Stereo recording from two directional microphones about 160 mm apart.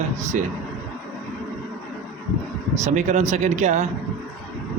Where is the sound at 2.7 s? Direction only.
45° right (ahead or behind).